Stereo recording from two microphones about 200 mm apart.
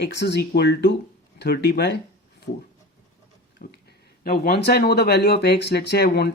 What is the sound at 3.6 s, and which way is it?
Speech, 45° left (ahead or behind).